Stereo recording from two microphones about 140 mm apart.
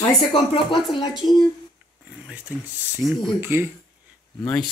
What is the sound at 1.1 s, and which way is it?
Speech, centre (ahead or behind).